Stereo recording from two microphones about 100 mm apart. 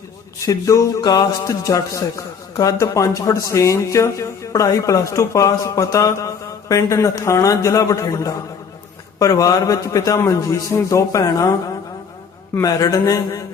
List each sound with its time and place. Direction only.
0.4 s speech: 35° left (ahead or behind)
12.6 s speech: 35° left (ahead or behind)